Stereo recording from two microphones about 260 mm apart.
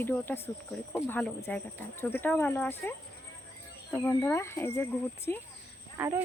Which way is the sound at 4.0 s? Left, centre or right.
Centre.